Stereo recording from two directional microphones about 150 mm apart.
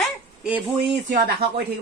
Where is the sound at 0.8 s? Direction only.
90° right.